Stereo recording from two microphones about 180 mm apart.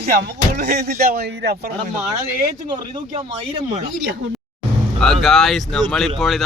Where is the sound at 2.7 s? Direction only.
25° right (ahead or behind).